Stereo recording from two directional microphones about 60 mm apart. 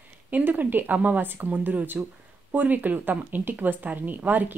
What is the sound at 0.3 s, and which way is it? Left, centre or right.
A woman's voice, right.